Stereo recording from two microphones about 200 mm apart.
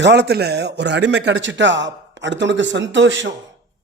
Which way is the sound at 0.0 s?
60° right (ahead or behind).